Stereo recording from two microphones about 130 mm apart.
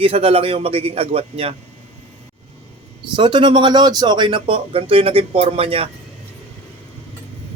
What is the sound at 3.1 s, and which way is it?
Speech, 40° right (ahead or behind).